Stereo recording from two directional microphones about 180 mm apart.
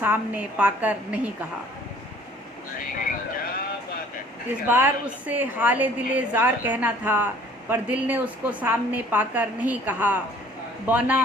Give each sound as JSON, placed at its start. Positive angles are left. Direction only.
{"t": 0.0, "sound": "a woman's voice", "side_deg": -10}
{"t": 3.1, "sound": "vehicle", "side_deg": 55}
{"t": 4.7, "sound": "a woman's voice", "side_deg": -10}